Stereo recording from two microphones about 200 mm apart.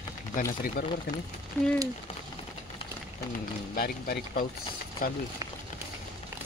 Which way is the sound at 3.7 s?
45° left (ahead or behind).